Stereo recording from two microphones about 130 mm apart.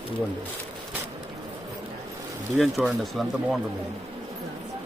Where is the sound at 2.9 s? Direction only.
Centre (ahead or behind).